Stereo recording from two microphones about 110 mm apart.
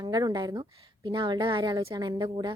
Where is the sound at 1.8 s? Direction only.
25° right (ahead or behind).